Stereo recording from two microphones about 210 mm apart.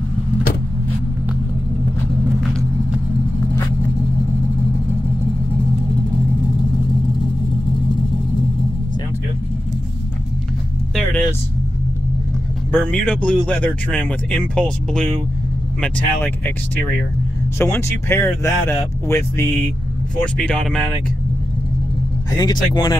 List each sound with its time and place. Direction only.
12.7 s speech: 5° left (ahead or behind)
22.4 s speech: 20° left (ahead or behind)